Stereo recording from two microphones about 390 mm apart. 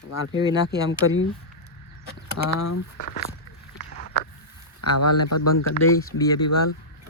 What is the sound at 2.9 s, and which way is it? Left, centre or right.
Speech, left.